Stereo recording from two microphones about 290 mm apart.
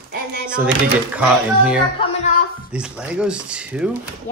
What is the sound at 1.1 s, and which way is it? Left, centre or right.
Speech, centre.